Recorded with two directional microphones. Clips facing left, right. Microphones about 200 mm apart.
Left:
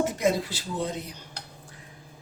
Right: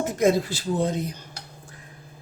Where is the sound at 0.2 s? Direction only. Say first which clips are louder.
Right 5 dB; 50° right (ahead or behind).